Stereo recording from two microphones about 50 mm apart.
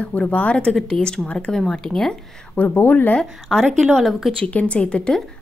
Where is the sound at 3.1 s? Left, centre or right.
Centre.